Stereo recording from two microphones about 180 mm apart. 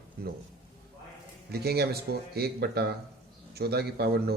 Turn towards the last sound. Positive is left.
turn(degrees=-65)  # may be behind; listen again after turning